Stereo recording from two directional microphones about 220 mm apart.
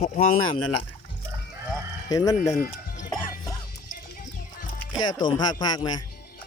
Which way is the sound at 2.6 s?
35° left (ahead or behind).